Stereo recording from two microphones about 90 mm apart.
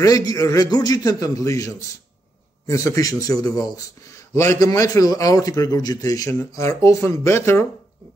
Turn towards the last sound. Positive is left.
turn(degrees=30)  # may be behind; listen again after turning